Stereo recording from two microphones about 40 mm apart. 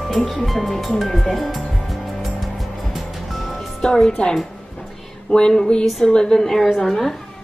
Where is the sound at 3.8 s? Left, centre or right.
Centre.